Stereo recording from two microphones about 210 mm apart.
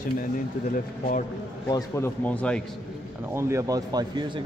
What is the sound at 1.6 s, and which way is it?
Speech, 15° left (ahead or behind).